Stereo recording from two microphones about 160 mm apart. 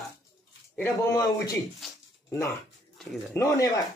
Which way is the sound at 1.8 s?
Centre (ahead or behind).